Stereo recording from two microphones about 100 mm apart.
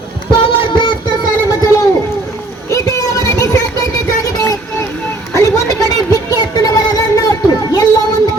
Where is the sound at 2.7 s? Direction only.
30° left (ahead or behind).